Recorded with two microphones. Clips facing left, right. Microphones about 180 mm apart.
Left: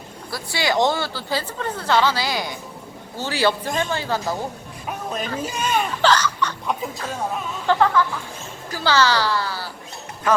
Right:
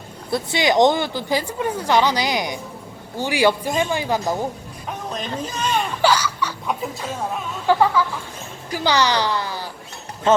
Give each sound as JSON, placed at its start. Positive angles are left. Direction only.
{"t": 0.3, "sound": "speech", "side_deg": -20}
{"t": 4.9, "sound": "speech", "side_deg": 5}
{"t": 6.0, "sound": "speech", "side_deg": -10}